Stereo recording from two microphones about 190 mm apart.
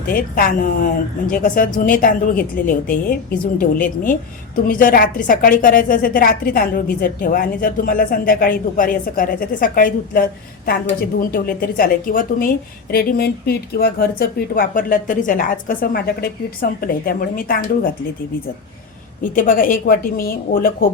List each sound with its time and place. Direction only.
0.1 s a woman's voice: 45° left (ahead or behind)
19.2 s a woman's voice: 45° left (ahead or behind)